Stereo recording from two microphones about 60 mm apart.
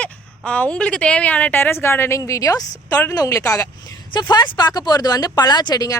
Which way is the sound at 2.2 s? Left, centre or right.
Left.